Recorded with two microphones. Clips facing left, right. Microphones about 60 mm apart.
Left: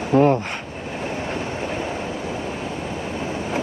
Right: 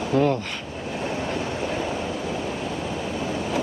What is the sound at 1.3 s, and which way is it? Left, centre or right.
Vehicle, left.